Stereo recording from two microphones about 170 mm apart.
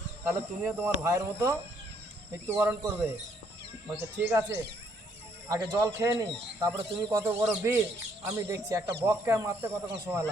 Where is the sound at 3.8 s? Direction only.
10° right (ahead or behind).